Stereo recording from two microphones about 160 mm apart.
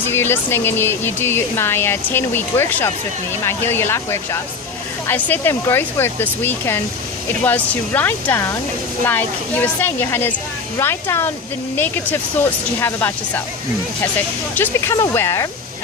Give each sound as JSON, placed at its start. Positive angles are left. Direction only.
{"t": 0.1, "sound": "speech", "side_deg": 15}
{"t": 12.8, "sound": "speech", "side_deg": 15}
{"t": 14.5, "sound": "speech", "side_deg": 10}